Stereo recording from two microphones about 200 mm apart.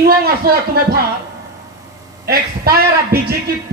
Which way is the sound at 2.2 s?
50° right (ahead or behind).